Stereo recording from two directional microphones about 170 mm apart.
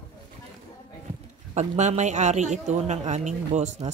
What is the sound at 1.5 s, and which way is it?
A woman's voice, 40° right (ahead or behind).